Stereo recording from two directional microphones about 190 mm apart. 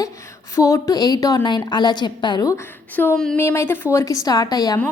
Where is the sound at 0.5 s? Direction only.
15° left (ahead or behind).